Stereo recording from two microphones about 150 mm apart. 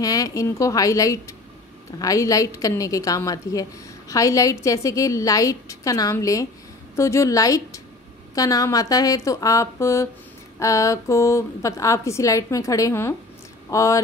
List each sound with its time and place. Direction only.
0.0 s a woman's voice: 25° left (ahead or behind)